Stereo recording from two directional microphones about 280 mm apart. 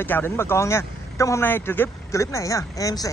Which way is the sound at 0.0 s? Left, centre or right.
Centre.